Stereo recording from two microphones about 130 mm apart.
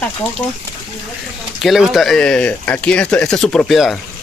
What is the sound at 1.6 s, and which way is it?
Speech, centre (ahead or behind).